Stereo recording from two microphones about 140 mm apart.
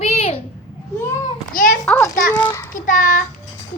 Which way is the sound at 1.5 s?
80° left.